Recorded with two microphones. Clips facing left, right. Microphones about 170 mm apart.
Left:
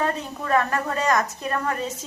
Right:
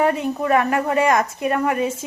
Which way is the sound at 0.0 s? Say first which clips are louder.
Right 7 dB; 15° right (ahead or behind).